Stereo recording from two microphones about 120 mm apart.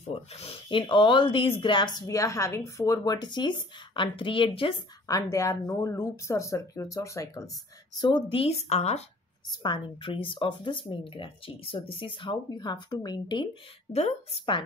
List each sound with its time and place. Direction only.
0.1 s speech: 55° left (ahead or behind); by 2.0 s 40° left (ahead or behind)
2.0 s speech: 25° left (ahead or behind); by 4.7 s 45° left (ahead or behind)
5.0 s speech: 30° left (ahead or behind); by 9.0 s 65° left (ahead or behind)
9.5 s speech: 40° left (ahead or behind)
13.9 s a woman's voice: 60° left (ahead or behind)